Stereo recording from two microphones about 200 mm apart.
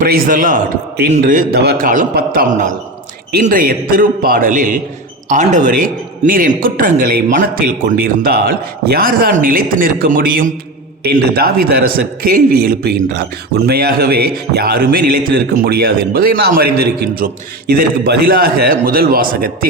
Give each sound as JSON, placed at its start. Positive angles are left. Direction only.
{"t": 0.0, "sound": "speech", "side_deg": -45}